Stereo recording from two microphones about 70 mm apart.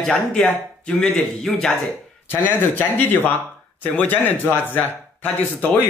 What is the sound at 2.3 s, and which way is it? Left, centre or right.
A man's voice, left.